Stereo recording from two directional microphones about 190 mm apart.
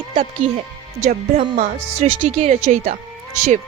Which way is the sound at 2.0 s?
30° right (ahead or behind).